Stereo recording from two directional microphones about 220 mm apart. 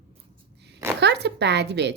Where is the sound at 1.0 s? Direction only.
50° right (ahead or behind).